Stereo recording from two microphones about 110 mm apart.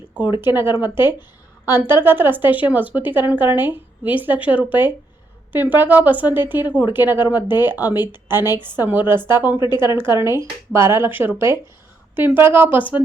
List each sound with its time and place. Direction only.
0.4 s a woman's voice: 20° right (ahead or behind)
9.6 s speech: 40° left (ahead or behind)
9.8 s speech: 20° right (ahead or behind)